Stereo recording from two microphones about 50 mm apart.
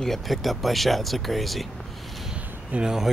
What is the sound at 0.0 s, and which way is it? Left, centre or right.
Speech, centre.